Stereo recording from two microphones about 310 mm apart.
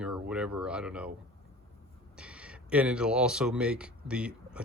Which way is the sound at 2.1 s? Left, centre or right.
Centre.